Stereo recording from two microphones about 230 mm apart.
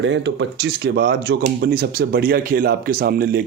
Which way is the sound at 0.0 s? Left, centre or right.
Right.